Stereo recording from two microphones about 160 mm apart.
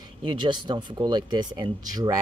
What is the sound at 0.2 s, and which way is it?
Speech, 30° right (ahead or behind).